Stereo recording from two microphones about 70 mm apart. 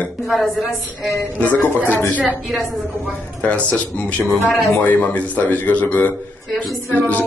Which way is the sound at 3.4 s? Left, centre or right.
Centre.